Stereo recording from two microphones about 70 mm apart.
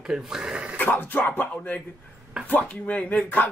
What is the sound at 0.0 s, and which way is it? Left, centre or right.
Speech, centre.